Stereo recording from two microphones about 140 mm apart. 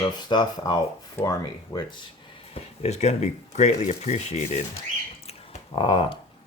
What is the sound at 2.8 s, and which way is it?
Speech, 50° left (ahead or behind).